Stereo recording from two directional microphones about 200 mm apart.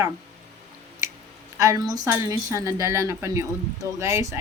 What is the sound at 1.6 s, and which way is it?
A woman's voice, 15° right (ahead or behind).